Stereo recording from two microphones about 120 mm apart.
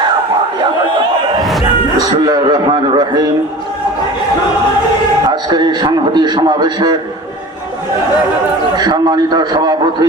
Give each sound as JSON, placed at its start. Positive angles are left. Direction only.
{"t": 2.0, "sound": "a man's voice", "side_deg": -35}
{"t": 5.3, "sound": "a man's voice", "side_deg": -35}
{"t": 8.7, "sound": "a man's voice", "side_deg": -35}